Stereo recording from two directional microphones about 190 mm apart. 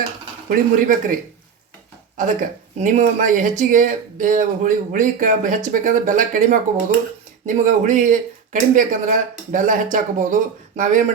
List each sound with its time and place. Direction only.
0.4 s speech: 45° right (ahead or behind)